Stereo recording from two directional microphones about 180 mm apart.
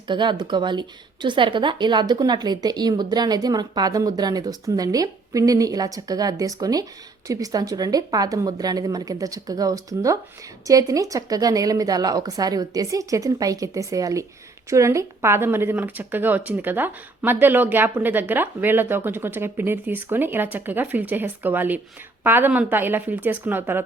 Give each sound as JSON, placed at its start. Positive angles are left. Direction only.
{"t": 0.1, "sound": "a woman's voice", "side_deg": -25}